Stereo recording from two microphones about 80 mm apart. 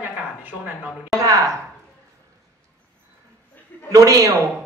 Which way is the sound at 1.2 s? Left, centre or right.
Right.